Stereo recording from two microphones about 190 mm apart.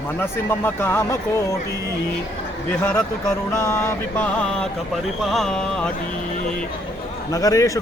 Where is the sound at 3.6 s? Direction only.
15° left (ahead or behind).